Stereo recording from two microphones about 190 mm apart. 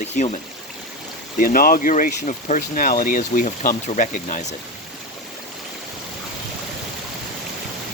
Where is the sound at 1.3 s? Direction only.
45° left (ahead or behind).